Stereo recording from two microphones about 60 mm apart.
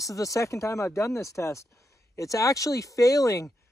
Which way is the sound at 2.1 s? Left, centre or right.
Left.